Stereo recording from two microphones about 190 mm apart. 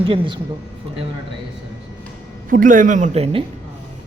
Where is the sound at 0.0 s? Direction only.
30° right (ahead or behind).